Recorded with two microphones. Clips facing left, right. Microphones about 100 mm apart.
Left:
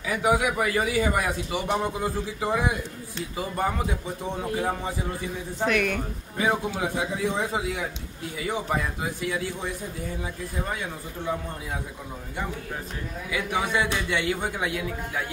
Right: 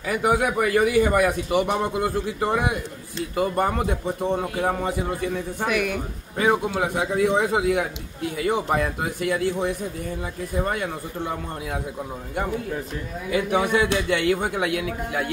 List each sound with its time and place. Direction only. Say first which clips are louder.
0.0 s a man's voice: right 2 dB; 50° right (ahead or behind)
5.2 s speech: right 3 dB; 65° right (ahead or behind)
5.7 s speech: even; 5° right (ahead or behind)
6.3 s speech: right 4 dB; 55° right (ahead or behind)
13.3 s speech: right 6 dB; 55° right (ahead or behind)